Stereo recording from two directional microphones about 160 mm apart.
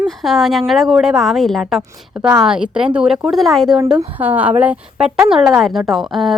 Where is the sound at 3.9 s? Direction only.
10° right (ahead or behind).